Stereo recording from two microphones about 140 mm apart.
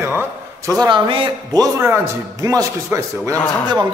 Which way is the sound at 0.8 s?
35° right (ahead or behind).